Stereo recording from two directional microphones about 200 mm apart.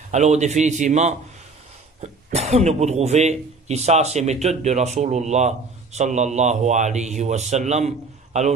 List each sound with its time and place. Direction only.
0.1 s speech: 35° right (ahead or behind)